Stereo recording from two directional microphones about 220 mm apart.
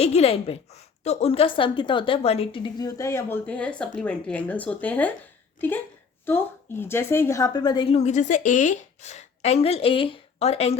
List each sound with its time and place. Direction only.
0.0 s a woman's voice: 30° left (ahead or behind)